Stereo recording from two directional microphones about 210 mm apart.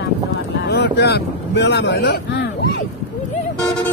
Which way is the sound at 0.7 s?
50° left (ahead or behind).